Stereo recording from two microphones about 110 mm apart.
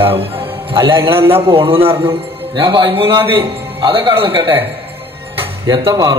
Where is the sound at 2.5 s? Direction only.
50° right (ahead or behind).